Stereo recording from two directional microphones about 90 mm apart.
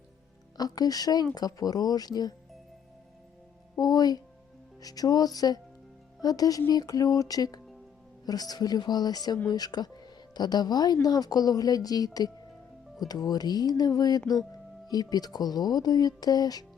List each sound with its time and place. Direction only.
0.5 s speech: 45° left (ahead or behind)
3.8 s music: 45° left (ahead or behind)
4.8 s speech: 45° left (ahead or behind)